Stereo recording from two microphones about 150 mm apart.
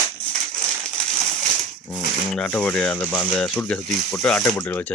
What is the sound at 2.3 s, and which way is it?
Speech, 10° left (ahead or behind).